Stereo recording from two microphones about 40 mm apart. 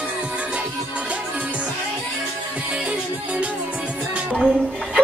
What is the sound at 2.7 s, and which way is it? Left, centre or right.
Music, right.